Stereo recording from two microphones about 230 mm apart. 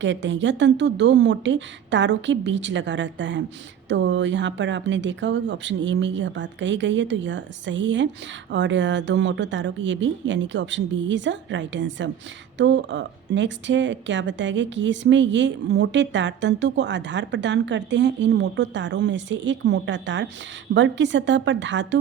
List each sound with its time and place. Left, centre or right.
0.0 s speech: right